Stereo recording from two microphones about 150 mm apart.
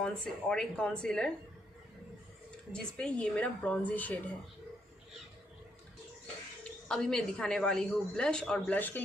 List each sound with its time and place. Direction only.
0.0 s a woman's voice: 5° left (ahead or behind)
2.7 s a woman's voice: 5° left (ahead or behind)
6.6 s a woman's voice: 5° left (ahead or behind)